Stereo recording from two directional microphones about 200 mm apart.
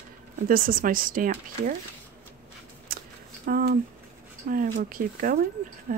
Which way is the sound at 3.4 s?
50° right (ahead or behind).